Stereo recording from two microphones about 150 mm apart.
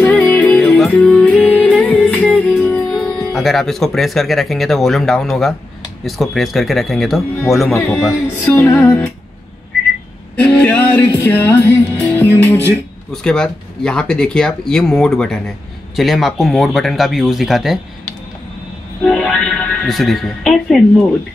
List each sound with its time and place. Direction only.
0.0 s music: 10° left (ahead or behind)
2.6 s speech: 5° left (ahead or behind)
8.5 s music: 20° left (ahead or behind)
10.3 s music: 5° left (ahead or behind)
12.6 s speech: 5° left (ahead or behind)
19.0 s speech: 5° left (ahead or behind)